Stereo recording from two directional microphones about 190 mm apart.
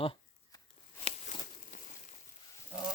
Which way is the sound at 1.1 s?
40° left (ahead or behind).